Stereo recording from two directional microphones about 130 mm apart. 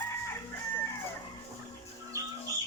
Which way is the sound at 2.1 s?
25° right (ahead or behind).